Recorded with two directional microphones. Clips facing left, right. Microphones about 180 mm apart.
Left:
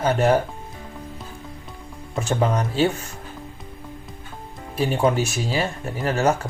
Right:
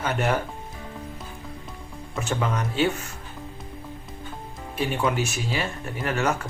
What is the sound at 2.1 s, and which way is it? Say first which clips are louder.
Speech: left 5 dB; 35° left (ahead or behind).